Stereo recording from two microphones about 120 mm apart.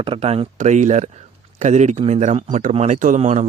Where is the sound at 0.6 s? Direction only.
90° right.